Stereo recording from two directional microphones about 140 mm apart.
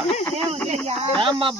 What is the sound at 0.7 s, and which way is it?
Speech, 50° right (ahead or behind).